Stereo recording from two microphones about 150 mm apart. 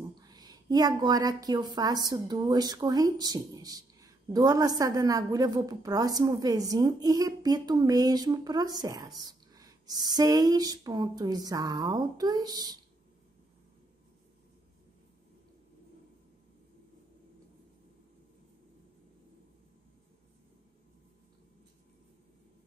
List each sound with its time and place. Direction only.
0.2 s a woman's voice: 25° right (ahead or behind)